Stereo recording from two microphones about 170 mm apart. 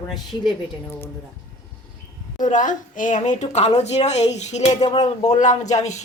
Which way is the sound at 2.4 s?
50° left (ahead or behind).